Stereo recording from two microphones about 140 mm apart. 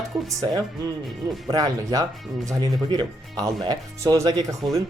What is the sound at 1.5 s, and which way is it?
Speech, 25° right (ahead or behind).